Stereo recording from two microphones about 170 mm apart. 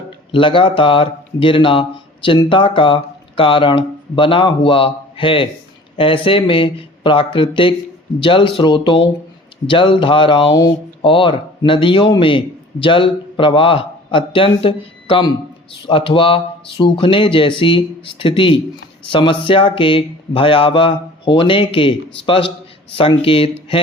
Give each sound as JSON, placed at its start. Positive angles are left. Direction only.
{"t": 0.3, "sound": "a man's voice", "side_deg": 30}